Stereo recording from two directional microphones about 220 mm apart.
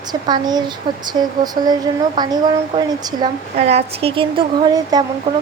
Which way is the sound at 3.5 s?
30° right (ahead or behind).